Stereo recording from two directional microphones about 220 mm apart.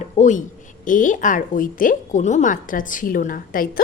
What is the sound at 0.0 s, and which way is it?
A man's voice, 35° left (ahead or behind).